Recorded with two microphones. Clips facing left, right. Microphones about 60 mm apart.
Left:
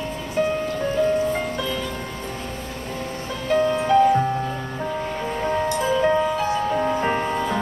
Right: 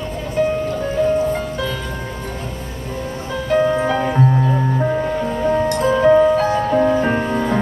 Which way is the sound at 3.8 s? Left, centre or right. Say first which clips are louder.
Left 3 dB; right.